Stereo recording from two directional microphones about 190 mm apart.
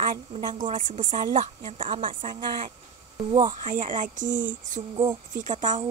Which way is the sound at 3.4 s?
45° right (ahead or behind).